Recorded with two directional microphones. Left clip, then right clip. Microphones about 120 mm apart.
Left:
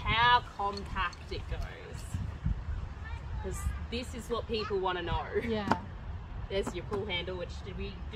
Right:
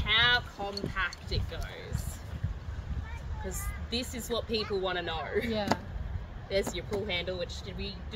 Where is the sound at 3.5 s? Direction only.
10° right (ahead or behind).